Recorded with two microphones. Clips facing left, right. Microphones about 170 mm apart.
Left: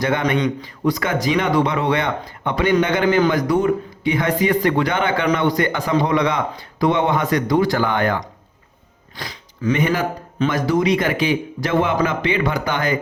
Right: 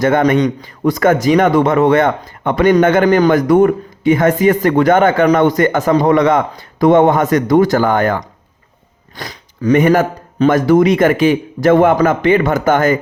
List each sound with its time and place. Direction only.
0.0 s a man's voice: 45° right (ahead or behind)